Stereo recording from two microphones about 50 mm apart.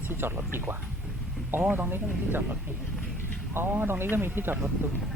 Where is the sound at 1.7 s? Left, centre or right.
Right.